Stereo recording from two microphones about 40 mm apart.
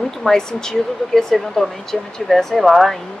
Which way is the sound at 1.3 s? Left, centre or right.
Centre.